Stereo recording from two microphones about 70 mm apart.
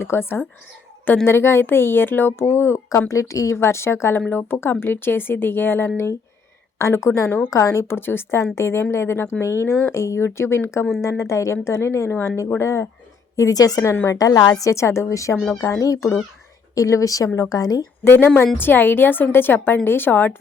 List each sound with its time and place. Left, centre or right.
0.0 s speech: left
6.7 s speech: left
7.3 s speech: left
7.5 s speech: left
13.3 s a woman's voice: left
13.9 s speech: left
14.2 s a woman's voice: left
18.0 s speech: left